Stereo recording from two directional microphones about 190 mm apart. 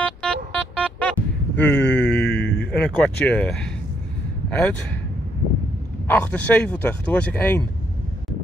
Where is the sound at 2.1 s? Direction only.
60° left (ahead or behind).